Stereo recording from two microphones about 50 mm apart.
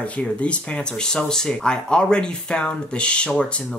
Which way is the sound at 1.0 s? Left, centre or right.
Centre.